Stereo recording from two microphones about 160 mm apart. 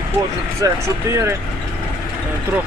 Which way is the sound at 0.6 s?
20° right (ahead or behind).